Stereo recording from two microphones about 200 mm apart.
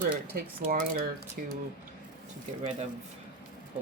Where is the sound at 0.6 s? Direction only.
40° right (ahead or behind).